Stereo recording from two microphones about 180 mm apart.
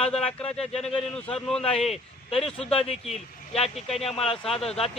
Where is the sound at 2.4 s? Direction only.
35° left (ahead or behind).